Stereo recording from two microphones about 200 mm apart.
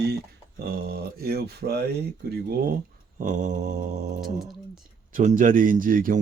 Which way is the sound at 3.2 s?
40° right (ahead or behind).